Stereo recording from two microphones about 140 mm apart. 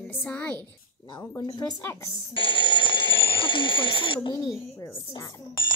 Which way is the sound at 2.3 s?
40° left (ahead or behind).